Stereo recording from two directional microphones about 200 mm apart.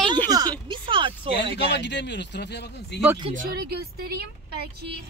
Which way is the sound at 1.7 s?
60° left (ahead or behind).